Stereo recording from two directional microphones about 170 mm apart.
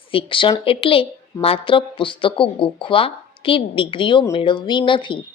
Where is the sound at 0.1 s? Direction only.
30° left (ahead or behind).